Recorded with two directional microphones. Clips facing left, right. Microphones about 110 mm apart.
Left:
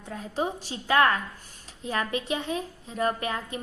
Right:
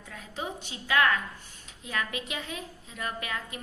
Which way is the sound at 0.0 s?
35° left (ahead or behind).